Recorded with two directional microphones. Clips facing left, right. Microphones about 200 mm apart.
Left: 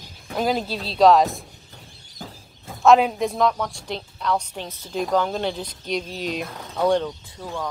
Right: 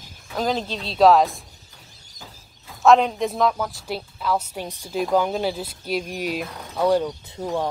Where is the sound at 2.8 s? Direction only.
5° left (ahead or behind).